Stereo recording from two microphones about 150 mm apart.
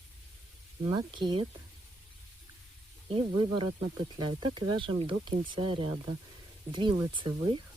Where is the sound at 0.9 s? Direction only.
30° right (ahead or behind).